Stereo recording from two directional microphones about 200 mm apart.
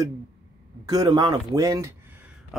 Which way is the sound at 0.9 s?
20° right (ahead or behind).